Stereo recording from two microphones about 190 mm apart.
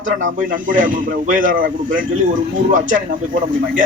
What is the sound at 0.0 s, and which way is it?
Speech, 45° right (ahead or behind).